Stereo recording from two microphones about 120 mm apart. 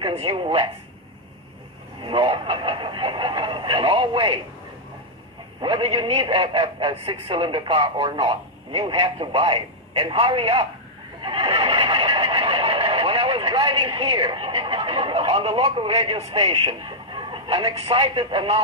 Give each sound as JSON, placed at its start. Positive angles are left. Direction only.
{"t": 0.0, "sound": "a man's voice", "side_deg": -45}
{"t": 2.0, "sound": "a man's voice", "side_deg": -45}
{"t": 5.6, "sound": "a man's voice", "side_deg": -45}
{"t": 11.1, "sound": "neigh", "side_deg": -45}